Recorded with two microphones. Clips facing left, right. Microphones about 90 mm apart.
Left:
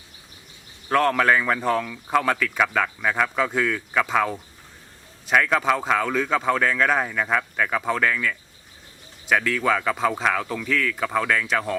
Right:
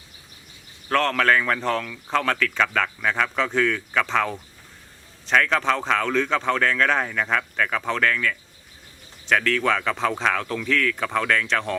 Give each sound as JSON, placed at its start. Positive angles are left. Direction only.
{"t": 0.9, "sound": "speech", "side_deg": 10}